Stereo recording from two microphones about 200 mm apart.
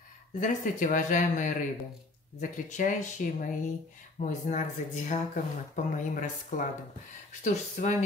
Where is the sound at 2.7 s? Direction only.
40° left (ahead or behind).